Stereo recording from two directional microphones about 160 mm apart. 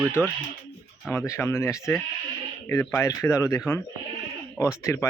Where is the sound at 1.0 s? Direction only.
15° left (ahead or behind).